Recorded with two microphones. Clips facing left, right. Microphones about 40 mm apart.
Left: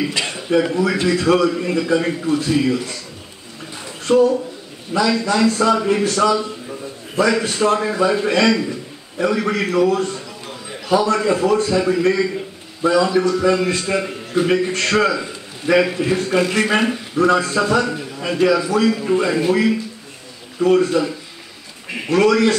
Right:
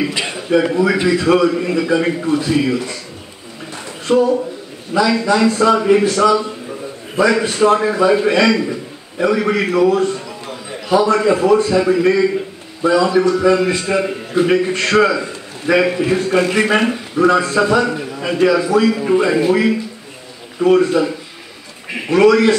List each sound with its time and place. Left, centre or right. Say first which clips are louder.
0.0 s a man's voice: right 2 dB; centre
4.1 s a man's voice: right 1 dB; centre